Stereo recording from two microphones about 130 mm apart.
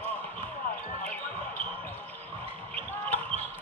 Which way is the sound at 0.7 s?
75° left (ahead or behind).